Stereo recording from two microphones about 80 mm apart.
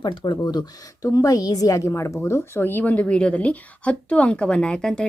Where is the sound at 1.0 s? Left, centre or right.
Left.